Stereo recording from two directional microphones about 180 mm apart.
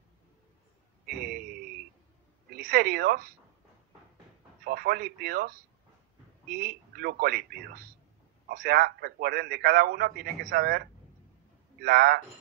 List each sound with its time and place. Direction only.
1.0 s a man's voice: 55° right (ahead or behind)
4.6 s a man's voice: 55° right (ahead or behind)
6.5 s a man's voice: 55° right (ahead or behind)